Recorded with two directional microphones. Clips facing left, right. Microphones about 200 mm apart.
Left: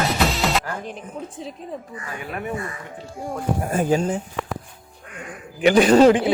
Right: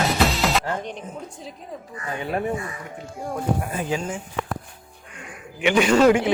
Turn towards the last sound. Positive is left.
turn(degrees=35)  # may be behind; listen again after turning